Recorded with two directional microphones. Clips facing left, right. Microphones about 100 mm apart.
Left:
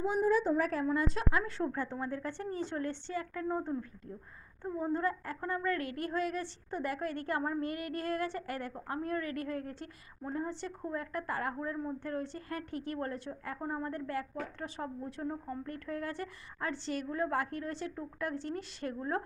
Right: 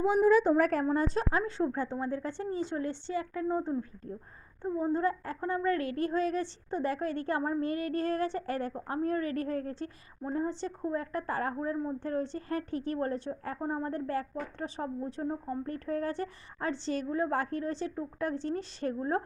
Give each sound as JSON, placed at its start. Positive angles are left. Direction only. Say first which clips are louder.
{"t": 0.0, "sound": "a woman's voice", "louder": "right 5 dB", "side_deg": -90}
{"t": 0.5, "sound": "a woman's voice", "louder": "right 5 dB", "side_deg": -55}
{"t": 0.9, "sound": "a woman's voice", "louder": "right 3 dB", "side_deg": -35}
{"t": 1.5, "sound": "a woman's voice", "louder": "right 4 dB", "side_deg": -20}